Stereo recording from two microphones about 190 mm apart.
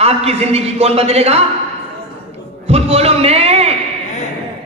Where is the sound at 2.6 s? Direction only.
35° right (ahead or behind).